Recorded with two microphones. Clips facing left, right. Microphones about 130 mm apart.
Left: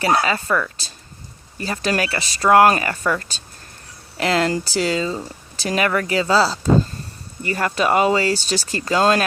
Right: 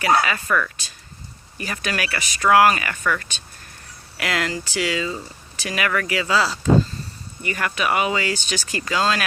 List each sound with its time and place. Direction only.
0.2 s speech: 25° left (ahead or behind)